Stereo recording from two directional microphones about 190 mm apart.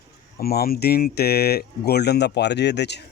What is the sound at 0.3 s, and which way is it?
Speech, 55° left (ahead or behind).